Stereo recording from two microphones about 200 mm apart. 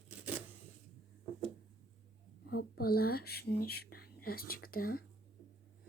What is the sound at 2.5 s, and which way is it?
Speech, 50° left (ahead or behind).